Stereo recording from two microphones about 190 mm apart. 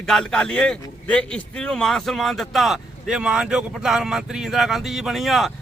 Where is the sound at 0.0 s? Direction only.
5° left (ahead or behind).